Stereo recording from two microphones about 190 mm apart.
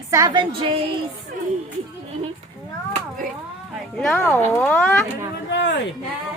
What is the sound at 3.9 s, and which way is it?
Speech, centre (ahead or behind).